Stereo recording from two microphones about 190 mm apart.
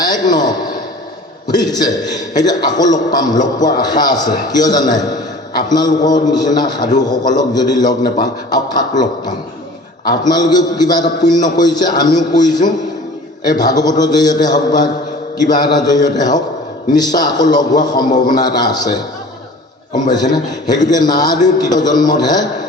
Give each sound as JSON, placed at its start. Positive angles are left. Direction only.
{"t": 0.0, "sound": "a man's voice", "side_deg": 20}
{"t": 20.1, "sound": "a man's voice", "side_deg": 20}